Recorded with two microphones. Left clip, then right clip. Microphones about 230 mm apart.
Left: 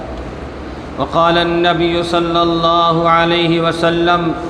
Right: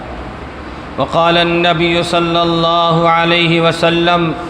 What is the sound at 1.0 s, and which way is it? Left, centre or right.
Mantra, right.